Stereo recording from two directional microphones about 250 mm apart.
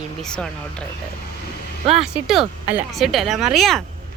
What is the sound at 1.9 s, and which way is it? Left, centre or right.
Speech, centre.